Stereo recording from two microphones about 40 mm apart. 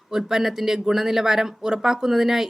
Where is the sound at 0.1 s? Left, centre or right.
Centre.